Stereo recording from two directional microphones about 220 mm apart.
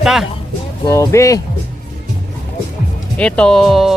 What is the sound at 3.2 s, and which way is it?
Speech, 5° left (ahead or behind).